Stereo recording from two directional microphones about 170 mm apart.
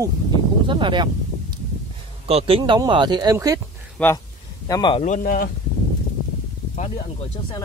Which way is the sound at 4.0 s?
5° left (ahead or behind).